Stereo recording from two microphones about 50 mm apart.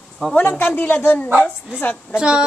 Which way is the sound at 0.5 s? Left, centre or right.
Left.